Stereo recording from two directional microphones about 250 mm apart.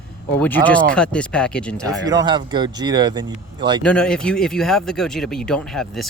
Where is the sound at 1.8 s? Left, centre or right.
Centre.